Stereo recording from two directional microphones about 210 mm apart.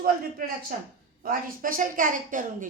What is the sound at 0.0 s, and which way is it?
A woman's voice, 45° right (ahead or behind).